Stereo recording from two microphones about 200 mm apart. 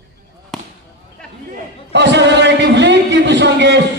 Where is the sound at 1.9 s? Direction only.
60° right (ahead or behind).